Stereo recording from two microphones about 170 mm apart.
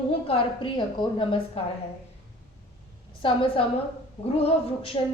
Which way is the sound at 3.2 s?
30° left (ahead or behind).